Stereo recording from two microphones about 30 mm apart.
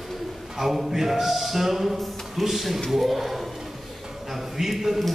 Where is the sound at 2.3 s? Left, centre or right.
Centre.